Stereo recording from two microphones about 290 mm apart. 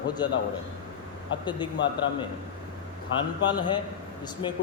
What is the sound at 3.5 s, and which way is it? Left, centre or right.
Speech, centre.